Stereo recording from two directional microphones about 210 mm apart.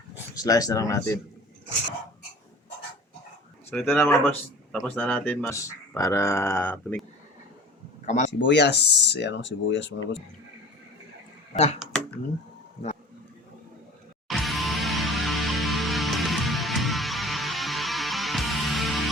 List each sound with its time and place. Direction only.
0.3 s speech: 15° left (ahead or behind)
3.7 s speech: 10° left (ahead or behind)
8.0 s speech: 35° left (ahead or behind)
8.3 s speech: 55° left (ahead or behind)
11.5 s speech: 30° left (ahead or behind)
14.3 s music: centre (ahead or behind)